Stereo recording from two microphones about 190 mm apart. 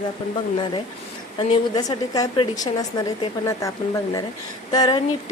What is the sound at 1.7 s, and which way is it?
A woman's voice, 20° left (ahead or behind).